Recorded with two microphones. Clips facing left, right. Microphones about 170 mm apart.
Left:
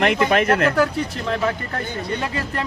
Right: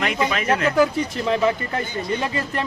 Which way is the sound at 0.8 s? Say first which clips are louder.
Right 1 dB; 5° right (ahead or behind).